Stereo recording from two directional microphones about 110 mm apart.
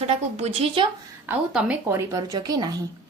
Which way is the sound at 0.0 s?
70° right (ahead or behind).